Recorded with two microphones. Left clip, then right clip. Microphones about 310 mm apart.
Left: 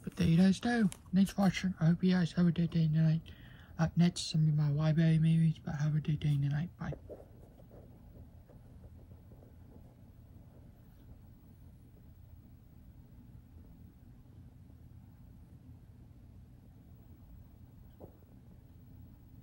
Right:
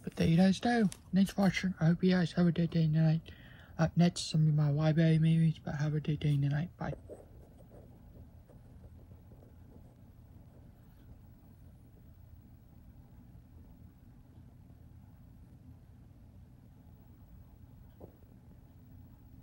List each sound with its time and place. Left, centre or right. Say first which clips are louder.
0.0 s speech: right 2 dB; centre